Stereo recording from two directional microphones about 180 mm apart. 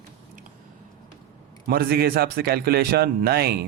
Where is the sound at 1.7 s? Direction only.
60° right (ahead or behind).